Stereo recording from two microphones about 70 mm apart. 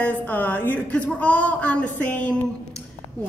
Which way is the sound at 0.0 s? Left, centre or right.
Left.